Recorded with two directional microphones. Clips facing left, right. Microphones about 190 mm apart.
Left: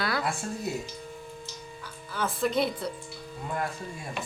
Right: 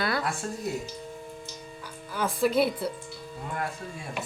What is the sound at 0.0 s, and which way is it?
Music, centre (ahead or behind).